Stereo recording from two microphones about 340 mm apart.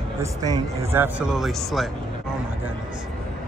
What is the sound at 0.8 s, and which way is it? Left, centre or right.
Speech, centre.